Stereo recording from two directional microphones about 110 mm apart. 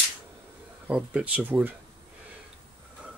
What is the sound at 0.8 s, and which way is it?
Speech, 10° right (ahead or behind).